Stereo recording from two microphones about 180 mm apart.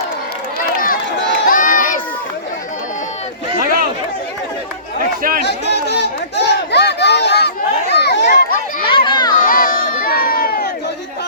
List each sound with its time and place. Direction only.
1.5 s run: 50° left (ahead or behind)
3.6 s chatter: 55° right (ahead or behind)
5.5 s a sound: 70° left (ahead or behind)
8.3 s a sound: 55° left (ahead or behind)
8.9 s crowd: 25° left (ahead or behind)
9.4 s crowd: 50° left (ahead or behind)